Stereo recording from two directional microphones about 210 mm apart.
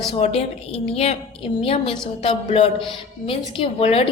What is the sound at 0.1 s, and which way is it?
A woman's voice, 30° left (ahead or behind).